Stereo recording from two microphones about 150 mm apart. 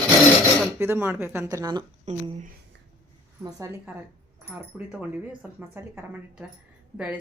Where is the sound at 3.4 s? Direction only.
20° right (ahead or behind).